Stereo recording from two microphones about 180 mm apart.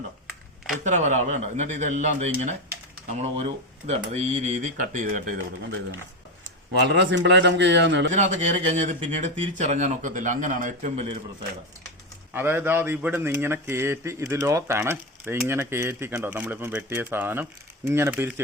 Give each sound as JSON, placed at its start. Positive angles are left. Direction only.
{"t": 0.9, "sound": "speech", "side_deg": -45}
{"t": 3.8, "sound": "speech", "side_deg": -35}
{"t": 5.4, "sound": "a man's voice", "side_deg": -80}
{"t": 8.1, "sound": "speech", "side_deg": -40}
{"t": 12.3, "sound": "speech", "side_deg": -10}